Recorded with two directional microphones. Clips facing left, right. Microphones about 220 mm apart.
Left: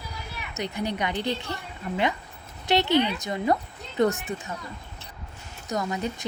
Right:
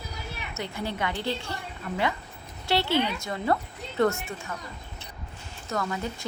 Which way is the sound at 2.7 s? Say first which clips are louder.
Left 3 dB; 20° left (ahead or behind).